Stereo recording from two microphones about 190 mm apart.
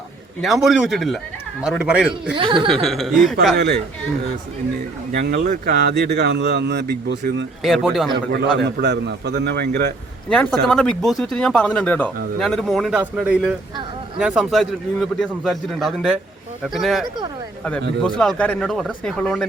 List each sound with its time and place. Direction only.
0.4 s speech: centre (ahead or behind)
2.3 s speech: 25° right (ahead or behind)
2.8 s speech: centre (ahead or behind)
5.1 s speech: 60° right (ahead or behind)
7.6 s speech: centre (ahead or behind)
8.3 s speech: 60° right (ahead or behind)
10.2 s speech: 5° left (ahead or behind)